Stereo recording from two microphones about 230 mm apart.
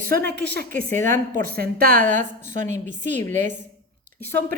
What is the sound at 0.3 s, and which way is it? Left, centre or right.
A woman's voice, right.